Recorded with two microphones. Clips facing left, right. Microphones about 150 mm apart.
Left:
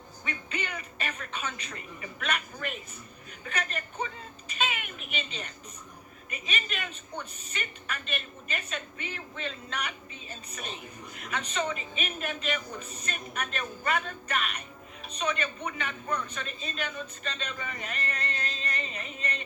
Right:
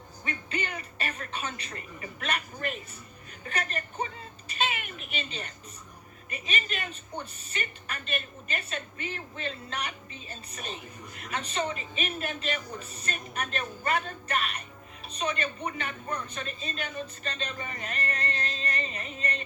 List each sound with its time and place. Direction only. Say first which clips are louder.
0.3 s a woman's voice: right 2 dB; 40° right (ahead or behind)
4.5 s a sound: right 1 dB; 40° right (ahead or behind)
6.3 s a woman's voice: right 2 dB; 40° right (ahead or behind)
11.1 s a woman's voice: even; 40° right (ahead or behind)